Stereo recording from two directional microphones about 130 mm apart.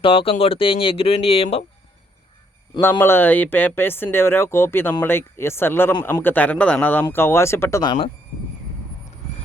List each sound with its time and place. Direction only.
0.0 s speech: 45° left (ahead or behind)
3.0 s speech: 15° left (ahead or behind)
7.8 s speech: 40° left (ahead or behind)